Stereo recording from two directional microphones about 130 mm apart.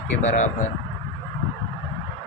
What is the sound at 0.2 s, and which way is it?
Speech, 65° left (ahead or behind).